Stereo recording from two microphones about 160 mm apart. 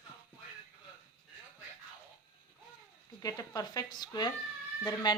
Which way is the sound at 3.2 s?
25° left (ahead or behind).